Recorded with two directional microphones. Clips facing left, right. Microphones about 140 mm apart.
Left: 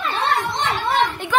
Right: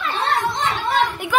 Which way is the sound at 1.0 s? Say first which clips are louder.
Right 1 dB; 10° right (ahead or behind).